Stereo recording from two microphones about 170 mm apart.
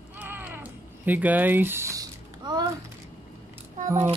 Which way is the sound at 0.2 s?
10° right (ahead or behind).